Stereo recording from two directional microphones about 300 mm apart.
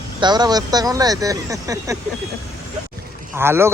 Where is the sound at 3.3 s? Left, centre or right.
Centre.